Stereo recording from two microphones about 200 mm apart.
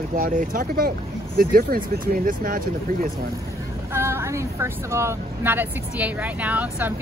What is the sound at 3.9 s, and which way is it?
Speech, 15° right (ahead or behind).